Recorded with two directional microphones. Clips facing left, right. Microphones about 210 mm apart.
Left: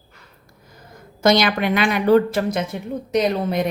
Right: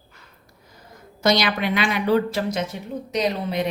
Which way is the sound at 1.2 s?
50° left (ahead or behind).